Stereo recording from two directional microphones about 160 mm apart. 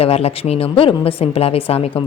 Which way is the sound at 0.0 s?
40° left (ahead or behind).